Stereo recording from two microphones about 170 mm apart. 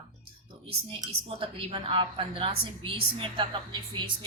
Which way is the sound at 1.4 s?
30° right (ahead or behind).